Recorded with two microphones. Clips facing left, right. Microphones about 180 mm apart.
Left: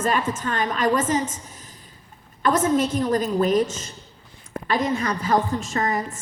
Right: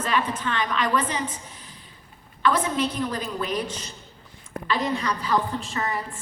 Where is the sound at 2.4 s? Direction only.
45° left (ahead or behind).